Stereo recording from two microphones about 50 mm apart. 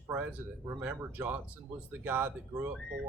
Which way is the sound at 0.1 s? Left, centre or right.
Right.